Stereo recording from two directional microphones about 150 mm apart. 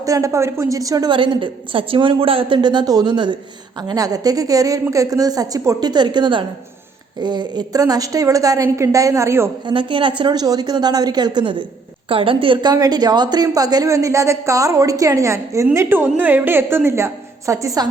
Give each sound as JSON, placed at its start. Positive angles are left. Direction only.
{"t": 0.0, "sound": "a woman's voice", "side_deg": -20}
{"t": 9.6, "sound": "a woman's voice", "side_deg": -35}